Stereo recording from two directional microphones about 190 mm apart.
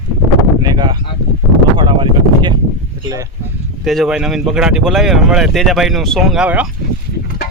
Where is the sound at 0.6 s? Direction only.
25° right (ahead or behind).